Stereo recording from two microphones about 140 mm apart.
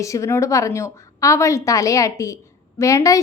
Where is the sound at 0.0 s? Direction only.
20° left (ahead or behind).